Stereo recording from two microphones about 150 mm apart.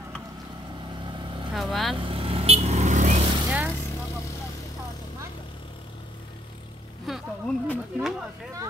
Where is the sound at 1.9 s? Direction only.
35° right (ahead or behind).